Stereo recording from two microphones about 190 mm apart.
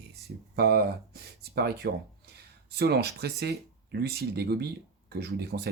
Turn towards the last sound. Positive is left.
turn(degrees=-60)  # may be behind; listen again after turning